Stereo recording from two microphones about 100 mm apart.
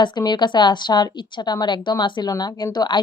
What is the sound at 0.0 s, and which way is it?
Speech, 50° left (ahead or behind).